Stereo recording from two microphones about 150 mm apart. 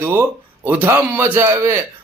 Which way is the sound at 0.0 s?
15° right (ahead or behind).